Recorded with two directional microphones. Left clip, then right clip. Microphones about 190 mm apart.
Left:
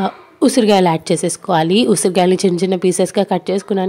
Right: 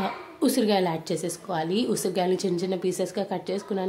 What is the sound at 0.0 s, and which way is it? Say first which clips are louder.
A woman's voice: left 10 dB; 35° left (ahead or behind).